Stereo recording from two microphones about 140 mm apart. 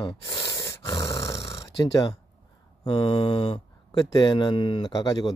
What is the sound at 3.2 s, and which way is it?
Speech, 30° left (ahead or behind).